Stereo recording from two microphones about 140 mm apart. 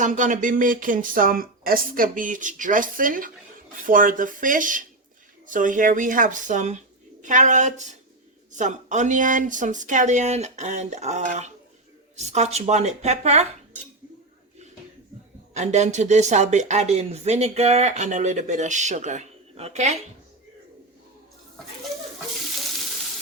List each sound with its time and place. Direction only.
0.0 s speech: 65° right (ahead or behind)
15.5 s speech: 55° right (ahead or behind)